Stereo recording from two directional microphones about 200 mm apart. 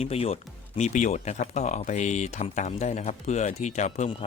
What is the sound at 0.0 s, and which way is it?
Speech, 30° left (ahead or behind).